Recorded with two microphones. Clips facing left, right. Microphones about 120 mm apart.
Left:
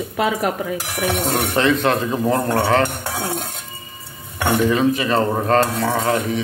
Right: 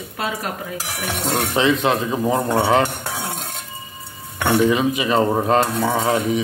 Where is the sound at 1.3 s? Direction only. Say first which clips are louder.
Right 2 dB; centre (ahead or behind).